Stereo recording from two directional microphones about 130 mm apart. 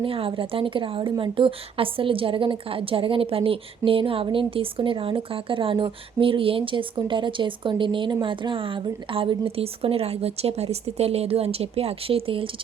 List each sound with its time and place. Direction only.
0.0 s a woman's voice: 45° right (ahead or behind)